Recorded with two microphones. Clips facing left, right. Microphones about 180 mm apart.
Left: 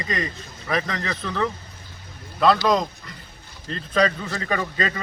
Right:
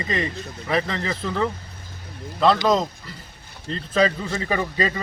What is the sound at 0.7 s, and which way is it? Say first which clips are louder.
Speech: right 2 dB; 25° right (ahead or behind).